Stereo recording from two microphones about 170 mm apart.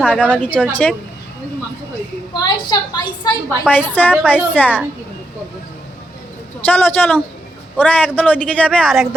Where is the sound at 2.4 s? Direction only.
25° left (ahead or behind).